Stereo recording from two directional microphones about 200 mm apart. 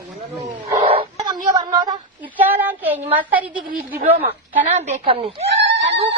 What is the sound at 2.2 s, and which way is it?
Child singing, 10° right (ahead or behind).